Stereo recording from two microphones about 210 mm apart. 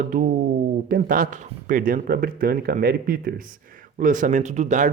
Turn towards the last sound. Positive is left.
turn(degrees=-35)  # may be behind; listen again after turning